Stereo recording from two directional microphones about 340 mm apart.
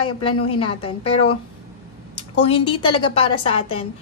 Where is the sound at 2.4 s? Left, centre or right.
Centre.